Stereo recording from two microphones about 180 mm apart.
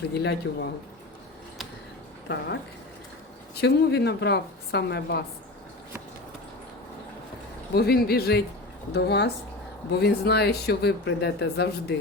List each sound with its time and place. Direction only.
0.2 s speech: 70° left (ahead or behind)
2.2 s speech: 75° left (ahead or behind)
7.8 s speech: 60° left (ahead or behind)